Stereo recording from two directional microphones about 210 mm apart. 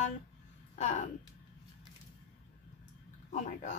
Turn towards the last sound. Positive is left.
turn(degrees=35)  # may be behind; listen again after turning